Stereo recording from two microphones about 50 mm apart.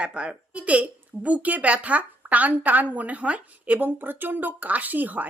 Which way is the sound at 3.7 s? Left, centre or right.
Right.